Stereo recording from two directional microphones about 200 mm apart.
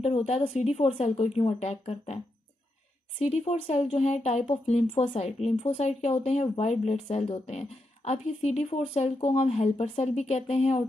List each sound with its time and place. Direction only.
0.0 s speech: 30° left (ahead or behind)
3.2 s speech: 35° left (ahead or behind)